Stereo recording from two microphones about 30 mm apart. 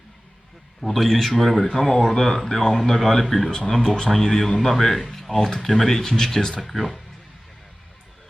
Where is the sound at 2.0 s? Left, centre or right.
Centre.